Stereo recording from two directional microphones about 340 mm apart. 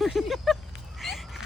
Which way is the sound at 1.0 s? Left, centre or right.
Centre.